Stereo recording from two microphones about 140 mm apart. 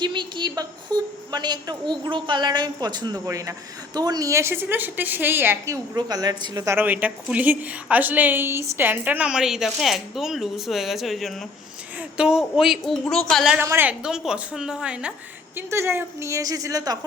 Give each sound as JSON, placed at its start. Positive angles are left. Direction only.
{"t": 0.0, "sound": "a woman's voice", "side_deg": -35}
{"t": 6.7, "sound": "a woman's voice", "side_deg": -10}
{"t": 13.6, "sound": "a woman's voice", "side_deg": -15}
{"t": 15.5, "sound": "a woman's voice", "side_deg": -20}